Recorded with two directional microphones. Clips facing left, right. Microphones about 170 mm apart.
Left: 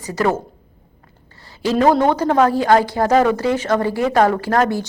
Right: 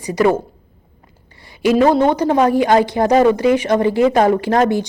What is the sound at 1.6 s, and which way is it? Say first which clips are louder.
A woman's voice: right 2 dB; 15° right (ahead or behind).